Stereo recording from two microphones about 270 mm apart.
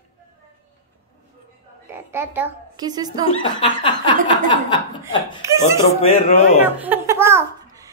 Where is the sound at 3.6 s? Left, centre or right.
Centre.